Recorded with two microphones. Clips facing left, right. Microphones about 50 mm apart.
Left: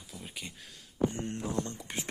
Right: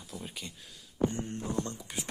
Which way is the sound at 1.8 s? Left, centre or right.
Left.